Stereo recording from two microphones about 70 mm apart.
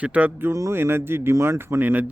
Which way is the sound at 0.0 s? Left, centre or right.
Right.